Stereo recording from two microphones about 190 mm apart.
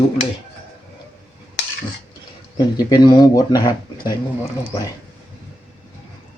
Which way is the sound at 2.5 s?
20° left (ahead or behind).